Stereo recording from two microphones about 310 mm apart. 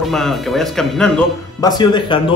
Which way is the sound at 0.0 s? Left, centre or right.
Centre.